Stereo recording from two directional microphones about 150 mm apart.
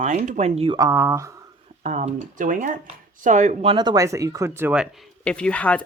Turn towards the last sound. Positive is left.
turn(degrees=10)  # may be behind; listen again after turning